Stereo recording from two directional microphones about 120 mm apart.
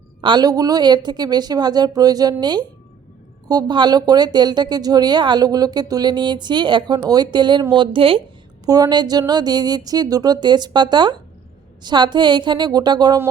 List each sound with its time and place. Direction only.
0.2 s speech: 40° right (ahead or behind)
8.6 s speech: 30° right (ahead or behind)